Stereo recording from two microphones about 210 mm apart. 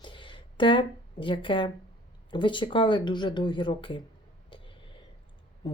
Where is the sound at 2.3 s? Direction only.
20° left (ahead or behind).